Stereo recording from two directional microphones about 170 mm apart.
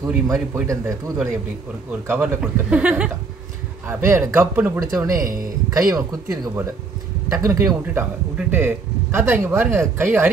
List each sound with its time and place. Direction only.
0.1 s a man's voice: 5° right (ahead or behind)
0.7 s speech: 20° right (ahead or behind)
5.2 s speech: 55° right (ahead or behind)
5.7 s speech: 20° right (ahead or behind)